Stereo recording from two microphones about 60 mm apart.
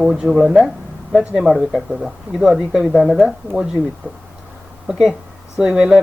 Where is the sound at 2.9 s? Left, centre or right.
Centre.